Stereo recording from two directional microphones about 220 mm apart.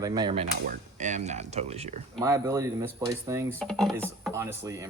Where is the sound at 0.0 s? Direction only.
20° right (ahead or behind).